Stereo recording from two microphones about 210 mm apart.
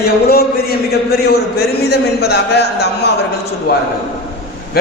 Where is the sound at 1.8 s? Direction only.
50° left (ahead or behind).